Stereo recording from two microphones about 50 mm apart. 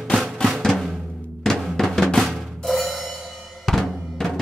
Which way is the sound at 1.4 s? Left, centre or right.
Centre.